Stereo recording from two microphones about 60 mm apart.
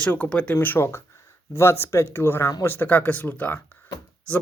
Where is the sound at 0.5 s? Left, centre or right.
Left.